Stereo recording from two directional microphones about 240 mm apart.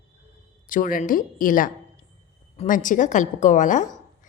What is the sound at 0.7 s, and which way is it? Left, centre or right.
A woman's voice, left.